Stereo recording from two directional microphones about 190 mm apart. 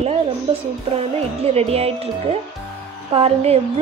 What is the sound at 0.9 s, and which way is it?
Speech, 30° right (ahead or behind).